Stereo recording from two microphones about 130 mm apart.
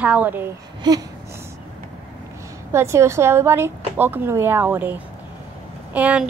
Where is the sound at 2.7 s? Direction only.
20° right (ahead or behind).